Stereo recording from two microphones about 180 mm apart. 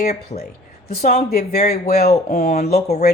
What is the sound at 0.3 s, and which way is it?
Speech, 35° left (ahead or behind).